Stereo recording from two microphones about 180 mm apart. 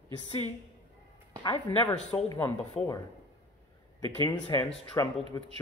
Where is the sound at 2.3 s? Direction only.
10° left (ahead or behind).